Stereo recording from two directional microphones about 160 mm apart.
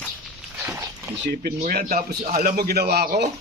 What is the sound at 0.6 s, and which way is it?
Dog, 15° right (ahead or behind).